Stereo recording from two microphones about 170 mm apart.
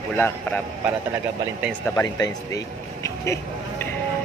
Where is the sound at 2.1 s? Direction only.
20° left (ahead or behind).